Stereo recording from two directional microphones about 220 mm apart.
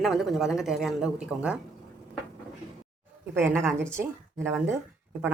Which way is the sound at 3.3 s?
10° right (ahead or behind).